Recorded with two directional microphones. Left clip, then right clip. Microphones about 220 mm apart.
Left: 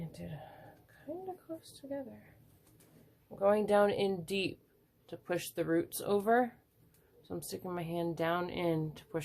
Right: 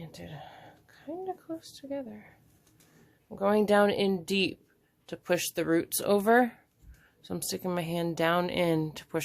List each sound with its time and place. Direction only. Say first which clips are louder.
0.0 s a sound: right 3 dB; 35° right (ahead or behind)
1.6 s speech: right 4 dB; 40° right (ahead or behind)
3.2 s speech: right 4 dB; 35° right (ahead or behind)